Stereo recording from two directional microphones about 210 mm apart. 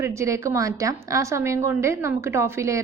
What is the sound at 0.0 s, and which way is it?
A woman's voice, 15° right (ahead or behind).